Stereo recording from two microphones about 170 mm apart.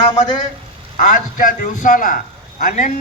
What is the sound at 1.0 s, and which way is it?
A man's voice, 50° left (ahead or behind).